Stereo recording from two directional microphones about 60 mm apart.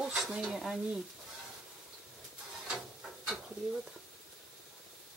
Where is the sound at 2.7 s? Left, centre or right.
Centre.